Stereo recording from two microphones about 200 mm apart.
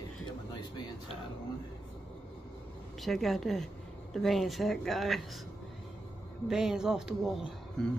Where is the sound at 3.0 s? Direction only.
Centre (ahead or behind).